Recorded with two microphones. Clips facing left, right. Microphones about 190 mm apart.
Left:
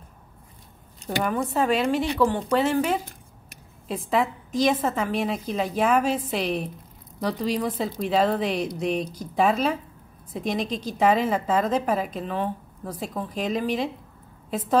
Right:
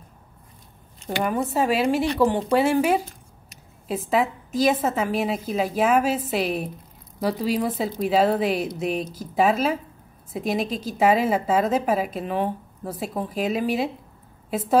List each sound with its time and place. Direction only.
1.5 s a woman's voice: 10° right (ahead or behind)